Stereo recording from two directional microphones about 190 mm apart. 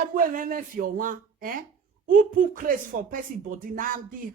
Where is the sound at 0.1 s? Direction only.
45° right (ahead or behind).